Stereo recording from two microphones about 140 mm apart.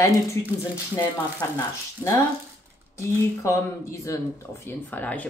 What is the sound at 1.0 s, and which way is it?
Speech, 25° left (ahead or behind).